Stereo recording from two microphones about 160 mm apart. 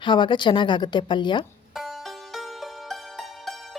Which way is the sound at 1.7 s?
Centre (ahead or behind).